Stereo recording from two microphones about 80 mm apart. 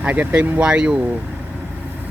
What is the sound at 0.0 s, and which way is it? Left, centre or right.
Speech, right.